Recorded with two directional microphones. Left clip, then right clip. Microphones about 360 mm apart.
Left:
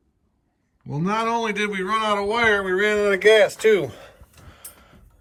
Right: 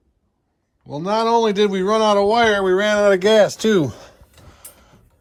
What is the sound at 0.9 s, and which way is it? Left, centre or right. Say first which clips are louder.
Speech: right 5 dB; centre.